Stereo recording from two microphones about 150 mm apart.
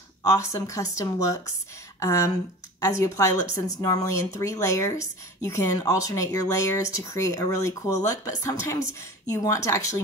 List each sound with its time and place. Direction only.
0.3 s speech: 25° left (ahead or behind)